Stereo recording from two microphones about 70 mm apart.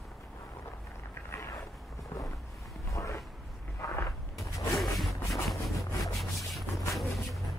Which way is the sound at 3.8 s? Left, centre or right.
Left.